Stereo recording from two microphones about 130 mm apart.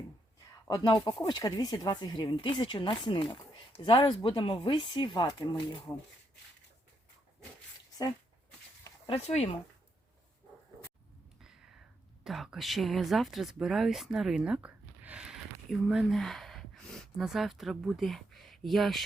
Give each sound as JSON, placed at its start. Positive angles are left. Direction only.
{"t": 0.7, "sound": "speech", "side_deg": 30}
{"t": 9.0, "sound": "speech", "side_deg": 55}
{"t": 11.3, "sound": "a sound", "side_deg": -5}
{"t": 12.2, "sound": "speech", "side_deg": 0}